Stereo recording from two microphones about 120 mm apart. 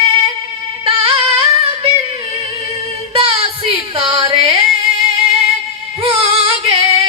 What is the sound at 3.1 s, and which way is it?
Yodeling, 50° right (ahead or behind).